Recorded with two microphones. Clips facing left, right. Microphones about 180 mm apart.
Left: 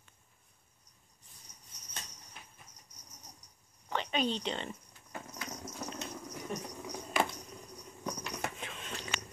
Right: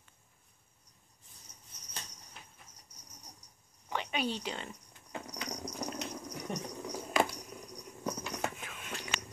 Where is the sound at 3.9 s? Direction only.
10° right (ahead or behind).